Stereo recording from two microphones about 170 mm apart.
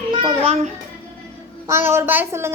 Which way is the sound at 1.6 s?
15° right (ahead or behind).